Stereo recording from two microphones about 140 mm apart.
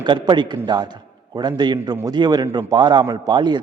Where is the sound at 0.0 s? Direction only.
35° right (ahead or behind).